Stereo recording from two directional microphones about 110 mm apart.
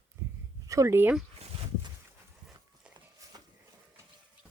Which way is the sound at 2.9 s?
35° right (ahead or behind).